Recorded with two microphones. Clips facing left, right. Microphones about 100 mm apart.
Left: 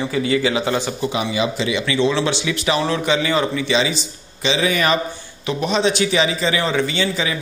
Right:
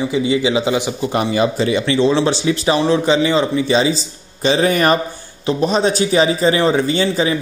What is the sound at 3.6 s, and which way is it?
A man's voice, 35° right (ahead or behind).